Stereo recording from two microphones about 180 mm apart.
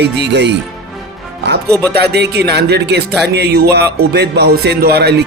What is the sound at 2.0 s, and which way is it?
A man's voice, 65° right (ahead or behind).